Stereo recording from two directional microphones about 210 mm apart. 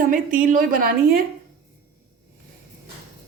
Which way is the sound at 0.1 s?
40° right (ahead or behind).